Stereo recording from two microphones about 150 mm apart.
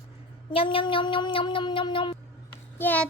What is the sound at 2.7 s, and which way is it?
Speech, 10° left (ahead or behind).